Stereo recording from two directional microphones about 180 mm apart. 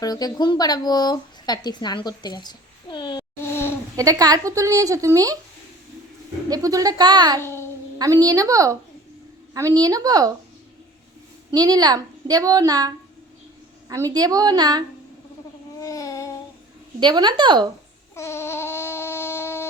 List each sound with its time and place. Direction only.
0.0 s speech: 20° left (ahead or behind)
3.4 s a sound: 10° left (ahead or behind)
3.9 s a woman's voice: 20° right (ahead or behind)
6.5 s a woman's voice: 20° right (ahead or behind)
11.5 s a woman's voice: 20° right (ahead or behind)
13.9 s a woman's voice: 20° right (ahead or behind)
15.8 s babbling: 20° left (ahead or behind)
17.0 s a woman's voice: 25° right (ahead or behind)
18.1 s a sound: 15° left (ahead or behind)